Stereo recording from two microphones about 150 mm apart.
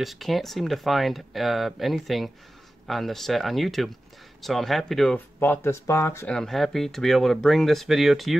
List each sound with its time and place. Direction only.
0.0 s speech: centre (ahead or behind)
5.4 s speech: 15° left (ahead or behind)
6.2 s speech: 5° left (ahead or behind)